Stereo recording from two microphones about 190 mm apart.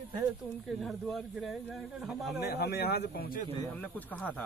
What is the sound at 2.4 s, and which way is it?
Speech, 60° left (ahead or behind).